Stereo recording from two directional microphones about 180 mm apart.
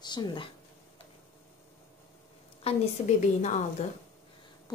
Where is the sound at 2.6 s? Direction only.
35° left (ahead or behind).